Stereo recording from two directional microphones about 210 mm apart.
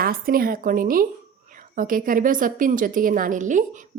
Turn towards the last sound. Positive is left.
turn(degrees=-40)  # may be behind; listen again after turning